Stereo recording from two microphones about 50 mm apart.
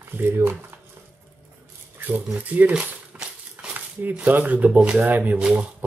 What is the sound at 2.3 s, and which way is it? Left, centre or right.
Speech, right.